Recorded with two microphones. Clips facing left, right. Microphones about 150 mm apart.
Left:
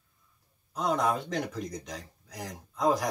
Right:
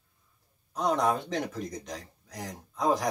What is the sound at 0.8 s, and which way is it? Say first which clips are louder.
Speech: right 1 dB; centre (ahead or behind).